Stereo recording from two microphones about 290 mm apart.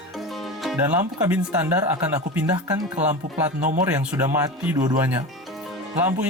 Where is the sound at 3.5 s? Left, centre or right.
Right.